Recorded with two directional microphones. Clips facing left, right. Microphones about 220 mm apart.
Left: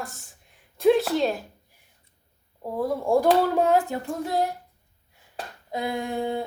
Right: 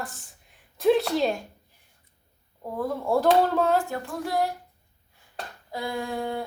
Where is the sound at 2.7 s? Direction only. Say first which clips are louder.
Left 3 dB; 10° left (ahead or behind).